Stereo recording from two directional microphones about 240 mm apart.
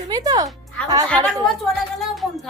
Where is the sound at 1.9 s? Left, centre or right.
Centre.